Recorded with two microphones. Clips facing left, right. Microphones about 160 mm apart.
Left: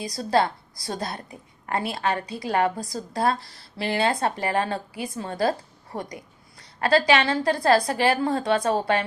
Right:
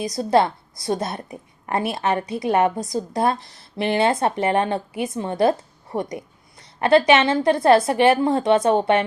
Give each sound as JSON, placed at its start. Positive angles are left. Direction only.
{"t": 0.0, "sound": "a woman's voice", "side_deg": -20}